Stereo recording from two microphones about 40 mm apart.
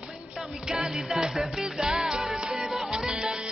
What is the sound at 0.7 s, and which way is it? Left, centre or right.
A man's voice, centre.